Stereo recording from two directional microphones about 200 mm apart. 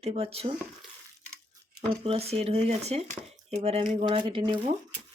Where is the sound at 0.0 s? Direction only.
30° right (ahead or behind).